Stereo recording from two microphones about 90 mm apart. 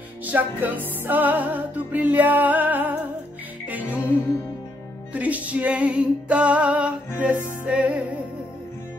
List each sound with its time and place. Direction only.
0.2 s music: 20° right (ahead or behind)